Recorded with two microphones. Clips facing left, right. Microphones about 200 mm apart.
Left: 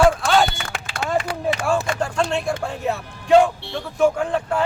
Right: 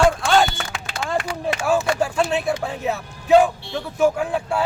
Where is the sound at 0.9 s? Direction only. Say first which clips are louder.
Left 2 dB; 55° left (ahead or behind).